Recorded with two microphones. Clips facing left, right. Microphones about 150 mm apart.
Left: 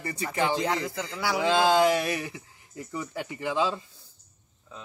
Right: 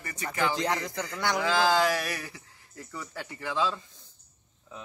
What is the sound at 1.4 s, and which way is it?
Speech, 25° left (ahead or behind).